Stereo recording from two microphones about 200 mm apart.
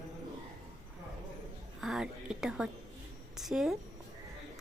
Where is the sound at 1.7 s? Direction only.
Centre (ahead or behind).